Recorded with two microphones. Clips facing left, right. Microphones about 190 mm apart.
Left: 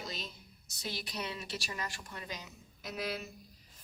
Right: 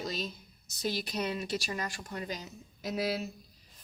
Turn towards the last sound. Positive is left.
turn(degrees=-35)  # may be behind; listen again after turning